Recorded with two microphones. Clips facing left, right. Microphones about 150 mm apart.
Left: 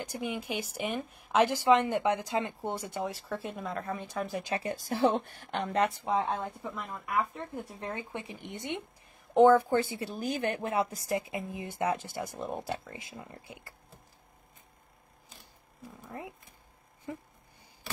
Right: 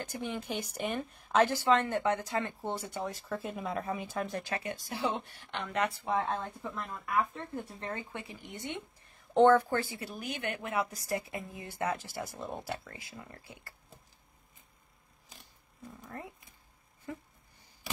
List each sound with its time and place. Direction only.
0.0 s a woman's voice: 10° left (ahead or behind)
4.8 s speech: 50° left (ahead or behind)
6.0 s a woman's voice: 15° left (ahead or behind)
9.3 s speech: 10° left (ahead or behind)
16.0 s speech: 10° left (ahead or behind)